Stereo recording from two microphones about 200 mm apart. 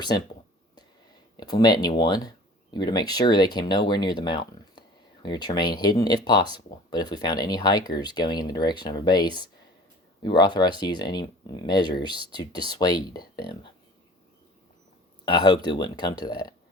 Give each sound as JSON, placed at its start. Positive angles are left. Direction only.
{"t": 1.4, "sound": "speech", "side_deg": 20}
{"t": 15.2, "sound": "speech", "side_deg": 20}